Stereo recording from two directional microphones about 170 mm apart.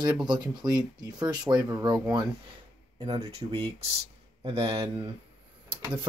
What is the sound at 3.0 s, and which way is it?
Speech, 30° right (ahead or behind).